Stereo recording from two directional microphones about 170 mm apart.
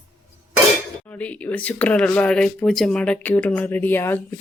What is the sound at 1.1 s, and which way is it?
Speech, 10° left (ahead or behind).